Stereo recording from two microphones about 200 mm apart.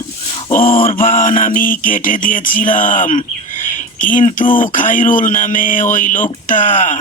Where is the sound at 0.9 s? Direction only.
40° left (ahead or behind).